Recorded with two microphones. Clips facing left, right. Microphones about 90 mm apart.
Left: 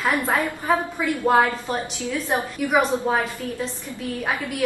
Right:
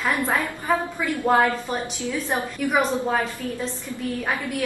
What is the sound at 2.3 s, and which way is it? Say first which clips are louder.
Speech: left 2 dB; 10° left (ahead or behind).